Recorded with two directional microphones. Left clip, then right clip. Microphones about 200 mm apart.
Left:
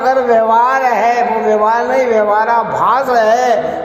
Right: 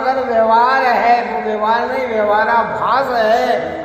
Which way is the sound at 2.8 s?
45° left (ahead or behind).